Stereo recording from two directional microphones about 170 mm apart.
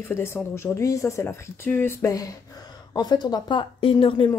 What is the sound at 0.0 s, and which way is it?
Speech, 15° left (ahead or behind).